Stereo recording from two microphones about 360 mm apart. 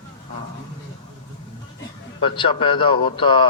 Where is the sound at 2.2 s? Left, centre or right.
Centre.